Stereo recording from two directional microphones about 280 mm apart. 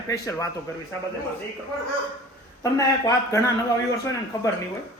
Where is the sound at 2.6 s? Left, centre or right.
Centre.